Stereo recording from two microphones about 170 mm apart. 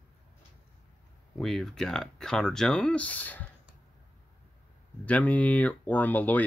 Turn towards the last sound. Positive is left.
turn(degrees=10)  # may be behind; listen again after turning